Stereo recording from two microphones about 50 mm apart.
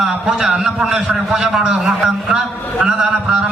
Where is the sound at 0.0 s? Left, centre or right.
Centre.